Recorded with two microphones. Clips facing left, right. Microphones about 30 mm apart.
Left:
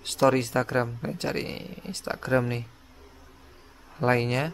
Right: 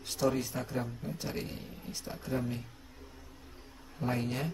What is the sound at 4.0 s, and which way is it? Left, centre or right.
Speech, left.